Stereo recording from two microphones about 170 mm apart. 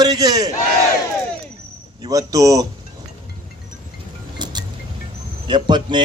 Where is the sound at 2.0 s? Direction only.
20° right (ahead or behind).